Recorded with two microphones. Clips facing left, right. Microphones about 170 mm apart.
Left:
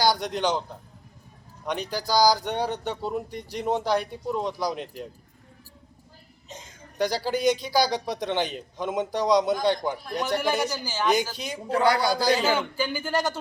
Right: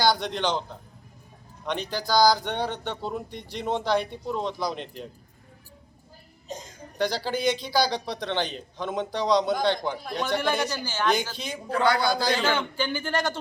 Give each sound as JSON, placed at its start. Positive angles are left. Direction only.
{"t": 0.0, "sound": "a man's voice", "side_deg": 10}
{"t": 1.9, "sound": "speech", "side_deg": 10}
{"t": 7.0, "sound": "speech", "side_deg": 10}
{"t": 11.8, "sound": "a man's voice", "side_deg": 35}
{"t": 12.5, "sound": "speech", "side_deg": 5}